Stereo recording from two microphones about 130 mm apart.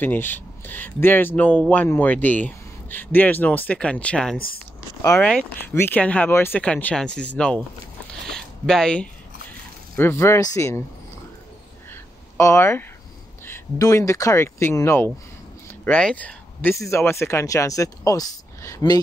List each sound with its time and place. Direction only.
0.0 s speech: 15° left (ahead or behind)
8.3 s a sound: 5° left (ahead or behind)
9.9 s speech: 20° left (ahead or behind)
11.9 s a sound: 20° left (ahead or behind)
13.5 s speech: 25° left (ahead or behind)
16.7 s speech: 20° left (ahead or behind)